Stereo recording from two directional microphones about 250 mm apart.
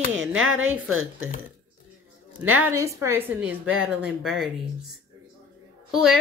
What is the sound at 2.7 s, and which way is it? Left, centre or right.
A woman's voice, centre.